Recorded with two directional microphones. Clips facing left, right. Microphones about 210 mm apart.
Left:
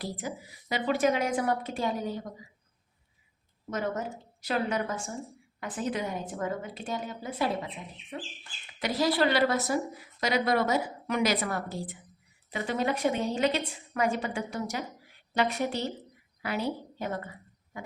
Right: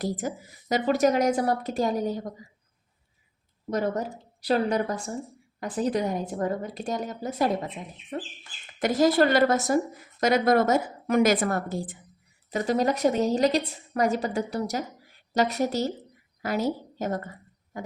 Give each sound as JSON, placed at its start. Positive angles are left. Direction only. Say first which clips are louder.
{"t": 0.0, "sound": "a woman's voice", "louder": "right 6 dB", "side_deg": -45}
{"t": 3.7, "sound": "a woman's voice", "louder": "right 5 dB", "side_deg": -35}